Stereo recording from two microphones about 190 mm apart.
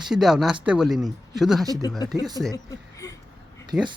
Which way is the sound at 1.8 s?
20° left (ahead or behind).